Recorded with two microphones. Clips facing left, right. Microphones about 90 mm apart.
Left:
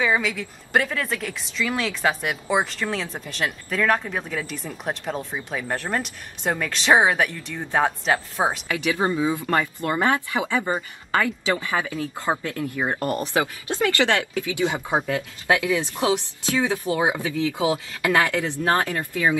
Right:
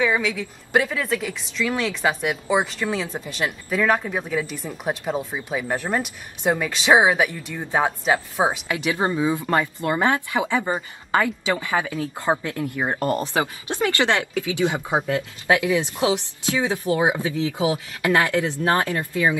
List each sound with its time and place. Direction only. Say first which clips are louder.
0.0 s speech: right 1 dB; centre (ahead or behind)
8.6 s speech: even; 20° right (ahead or behind)